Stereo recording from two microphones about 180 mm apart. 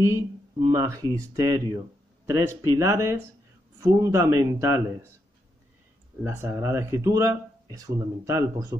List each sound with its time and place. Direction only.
0.7 s speech: 20° right (ahead or behind)
6.2 s speech: 15° right (ahead or behind)